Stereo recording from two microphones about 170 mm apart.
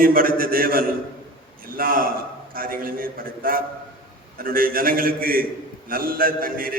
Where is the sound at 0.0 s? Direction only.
55° right (ahead or behind).